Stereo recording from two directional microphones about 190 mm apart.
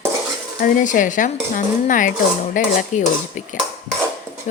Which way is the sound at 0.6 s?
45° left (ahead or behind).